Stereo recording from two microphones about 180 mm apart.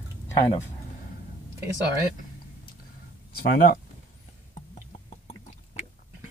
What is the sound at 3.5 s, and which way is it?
Speech, 55° left (ahead or behind).